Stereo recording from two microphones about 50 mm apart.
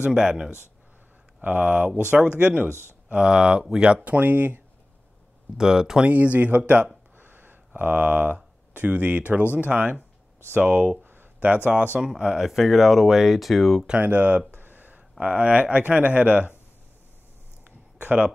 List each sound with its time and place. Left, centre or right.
0.0 s speech: centre
1.4 s speech: right
2.7 s speech: left
3.1 s speech: centre
5.6 s speech: centre
6.0 s speech: right
7.2 s a sound: right
8.7 s speech: right
11.1 s a sound: right
12.0 s speech: centre
14.0 s speech: right
14.5 s a sound: right
15.0 s speech: right
17.6 s a sound: right